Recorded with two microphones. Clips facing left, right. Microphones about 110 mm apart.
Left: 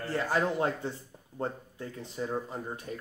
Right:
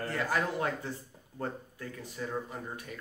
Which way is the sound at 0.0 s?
30° left (ahead or behind).